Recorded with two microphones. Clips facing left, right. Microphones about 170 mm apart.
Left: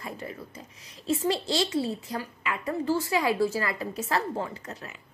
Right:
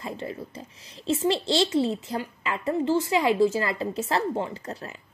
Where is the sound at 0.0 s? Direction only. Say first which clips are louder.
Right 4 dB; 25° right (ahead or behind).